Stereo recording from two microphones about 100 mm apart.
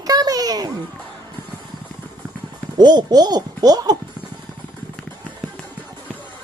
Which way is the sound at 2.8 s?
45° right (ahead or behind).